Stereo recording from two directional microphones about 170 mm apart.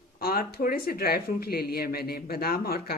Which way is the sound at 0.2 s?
60° left (ahead or behind).